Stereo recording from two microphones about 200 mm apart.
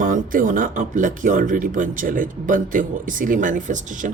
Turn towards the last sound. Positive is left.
turn(degrees=-40)  # may be behind; listen again after turning